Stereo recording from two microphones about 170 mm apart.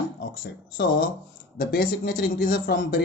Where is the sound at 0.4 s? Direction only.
65° left (ahead or behind).